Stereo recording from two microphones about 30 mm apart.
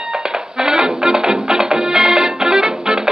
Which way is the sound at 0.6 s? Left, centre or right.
Right.